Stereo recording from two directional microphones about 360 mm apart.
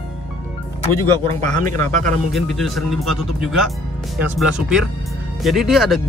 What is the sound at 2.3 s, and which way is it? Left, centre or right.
Speech, centre.